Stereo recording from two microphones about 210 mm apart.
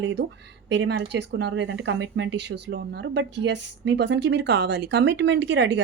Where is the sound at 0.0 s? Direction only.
55° right (ahead or behind).